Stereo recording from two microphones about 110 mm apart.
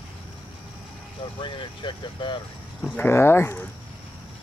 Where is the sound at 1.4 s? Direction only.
45° left (ahead or behind).